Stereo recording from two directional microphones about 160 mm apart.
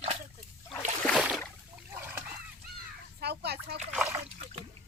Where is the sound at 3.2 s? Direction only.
90° right.